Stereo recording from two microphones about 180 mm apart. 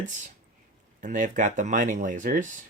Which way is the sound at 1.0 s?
45° right (ahead or behind).